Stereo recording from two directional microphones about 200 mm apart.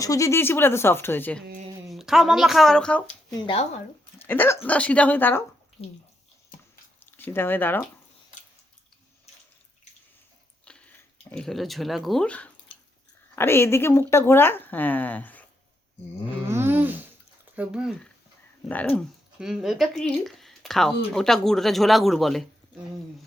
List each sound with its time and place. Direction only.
0.0 s speech: 15° left (ahead or behind)
3.4 s speech: 30° left (ahead or behind)
4.2 s dog: 10° left (ahead or behind)
4.6 s speech: 5° left (ahead or behind)
7.0 s speech: 10° left (ahead or behind)
10.7 s speech: 5° left (ahead or behind)
16.5 s a sound: 10° right (ahead or behind)
17.5 s speech: 5° right (ahead or behind)
18.7 s speech: 5° left (ahead or behind)
19.4 s speech: 5° right (ahead or behind)